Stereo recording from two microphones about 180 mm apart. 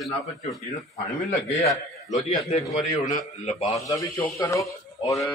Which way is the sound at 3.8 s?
15° left (ahead or behind).